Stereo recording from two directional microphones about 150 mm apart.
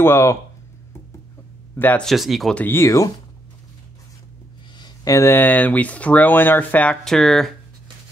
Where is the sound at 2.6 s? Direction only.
15° left (ahead or behind).